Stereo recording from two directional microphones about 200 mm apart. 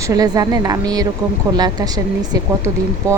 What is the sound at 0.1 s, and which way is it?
Speech, 20° right (ahead or behind).